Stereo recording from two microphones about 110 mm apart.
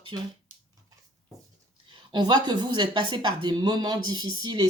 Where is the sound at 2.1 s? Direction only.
40° right (ahead or behind).